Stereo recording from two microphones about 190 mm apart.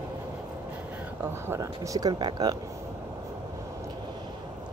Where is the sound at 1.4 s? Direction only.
15° right (ahead or behind).